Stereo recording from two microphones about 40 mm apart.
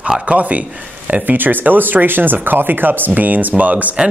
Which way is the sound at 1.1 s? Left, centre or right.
Right.